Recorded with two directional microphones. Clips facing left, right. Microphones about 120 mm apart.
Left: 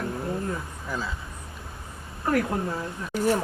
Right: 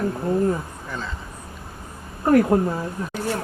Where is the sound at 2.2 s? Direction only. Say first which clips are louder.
Right 8 dB; 30° right (ahead or behind).